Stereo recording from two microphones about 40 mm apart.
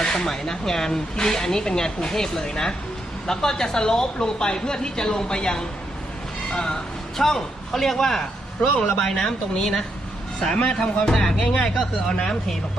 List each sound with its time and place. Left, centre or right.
0.0 s a sound: centre
0.3 s a man's voice: centre
11.1 s speech: centre
11.3 s speech: centre